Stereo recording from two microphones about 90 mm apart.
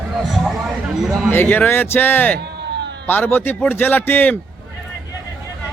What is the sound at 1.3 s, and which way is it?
A man's voice, 20° left (ahead or behind).